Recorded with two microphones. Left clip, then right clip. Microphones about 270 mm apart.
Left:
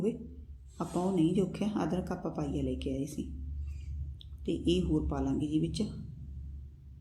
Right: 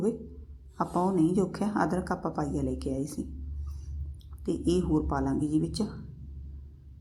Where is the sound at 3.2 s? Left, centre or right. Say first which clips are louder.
Right 3 dB; right.